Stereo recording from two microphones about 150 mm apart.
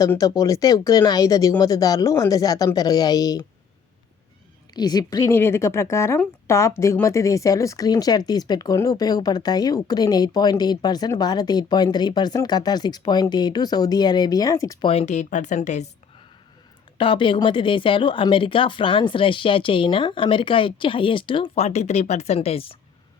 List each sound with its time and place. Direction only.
0.0 s a woman's voice: 25° left (ahead or behind)
4.7 s a woman's voice: 30° left (ahead or behind)
14.8 s a woman's voice: 45° left (ahead or behind)
17.0 s speech: 35° left (ahead or behind)